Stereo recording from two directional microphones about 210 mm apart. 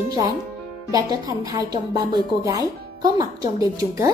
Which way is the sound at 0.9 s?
15° right (ahead or behind).